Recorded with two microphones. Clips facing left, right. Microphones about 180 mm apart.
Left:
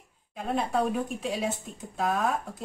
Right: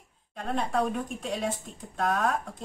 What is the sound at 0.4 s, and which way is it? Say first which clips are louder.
A woman's voice: left 1 dB; 5° left (ahead or behind).